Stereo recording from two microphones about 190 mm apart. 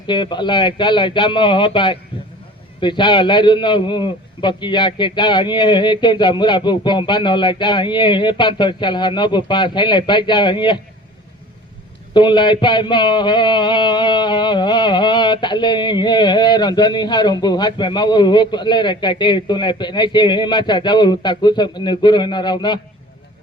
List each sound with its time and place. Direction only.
0.1 s speech: 25° left (ahead or behind)
12.1 s speech: 25° left (ahead or behind)